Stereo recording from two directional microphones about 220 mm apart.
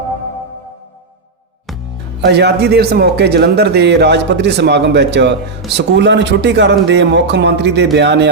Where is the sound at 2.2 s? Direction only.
50° right (ahead or behind).